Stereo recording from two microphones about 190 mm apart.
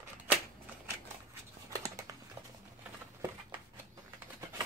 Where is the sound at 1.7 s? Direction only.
15° right (ahead or behind).